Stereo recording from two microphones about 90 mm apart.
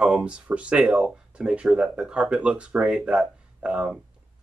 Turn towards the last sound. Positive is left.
turn(degrees=-10)  # may be behind; listen again after turning